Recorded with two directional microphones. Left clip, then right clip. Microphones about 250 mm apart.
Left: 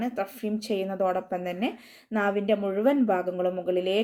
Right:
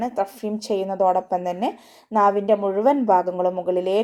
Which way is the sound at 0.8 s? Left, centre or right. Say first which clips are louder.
Right 9 dB; right.